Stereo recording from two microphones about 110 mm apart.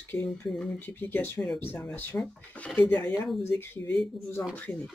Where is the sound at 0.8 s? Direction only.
20° left (ahead or behind).